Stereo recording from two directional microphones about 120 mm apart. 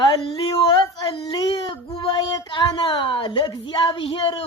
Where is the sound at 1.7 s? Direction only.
45° left (ahead or behind).